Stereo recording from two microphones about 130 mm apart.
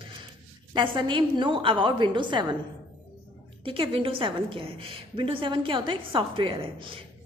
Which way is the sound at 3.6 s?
45° right (ahead or behind).